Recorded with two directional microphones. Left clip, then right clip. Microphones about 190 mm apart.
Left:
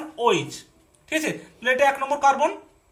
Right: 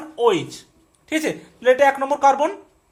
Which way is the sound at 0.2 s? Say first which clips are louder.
Right 3 dB; 45° right (ahead or behind).